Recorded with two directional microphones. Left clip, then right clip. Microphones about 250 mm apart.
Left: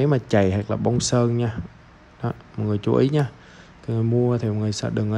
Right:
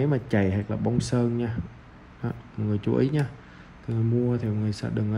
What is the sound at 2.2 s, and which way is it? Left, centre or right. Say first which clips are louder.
Speech: left 5 dB; right.